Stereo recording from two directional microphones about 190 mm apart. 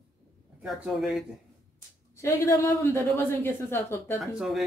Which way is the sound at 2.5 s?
15° left (ahead or behind).